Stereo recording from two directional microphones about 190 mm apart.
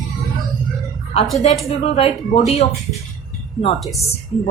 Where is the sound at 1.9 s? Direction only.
30° left (ahead or behind).